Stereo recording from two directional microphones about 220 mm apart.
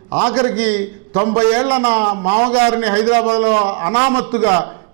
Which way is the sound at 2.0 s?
25° right (ahead or behind).